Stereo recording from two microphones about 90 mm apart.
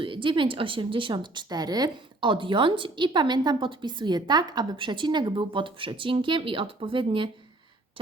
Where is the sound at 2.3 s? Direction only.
65° right (ahead or behind).